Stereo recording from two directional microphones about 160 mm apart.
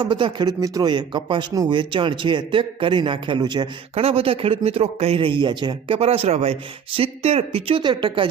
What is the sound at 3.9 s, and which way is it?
Speech, 40° right (ahead or behind).